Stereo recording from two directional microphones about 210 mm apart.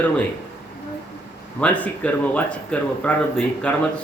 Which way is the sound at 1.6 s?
5° left (ahead or behind).